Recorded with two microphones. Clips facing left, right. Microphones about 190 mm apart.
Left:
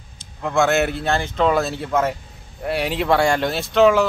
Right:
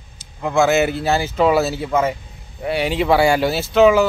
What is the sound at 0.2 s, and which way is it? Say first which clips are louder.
Speech: right 2 dB; 5° right (ahead or behind).